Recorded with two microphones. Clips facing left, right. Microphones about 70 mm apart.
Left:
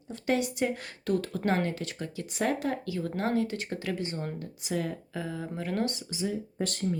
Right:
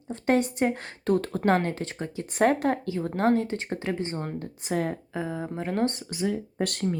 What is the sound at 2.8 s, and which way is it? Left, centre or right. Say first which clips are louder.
Speech: right 6 dB; right.